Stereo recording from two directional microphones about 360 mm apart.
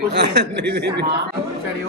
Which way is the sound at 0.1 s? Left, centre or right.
Right.